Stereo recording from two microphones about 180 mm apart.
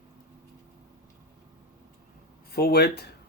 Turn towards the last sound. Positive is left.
turn(degrees=65)  # may be behind; listen again after turning